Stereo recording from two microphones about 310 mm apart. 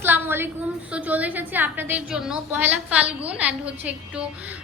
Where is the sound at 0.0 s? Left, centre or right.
Centre.